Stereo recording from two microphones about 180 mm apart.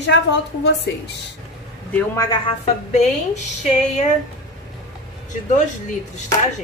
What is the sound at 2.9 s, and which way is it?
Speech, 40° left (ahead or behind).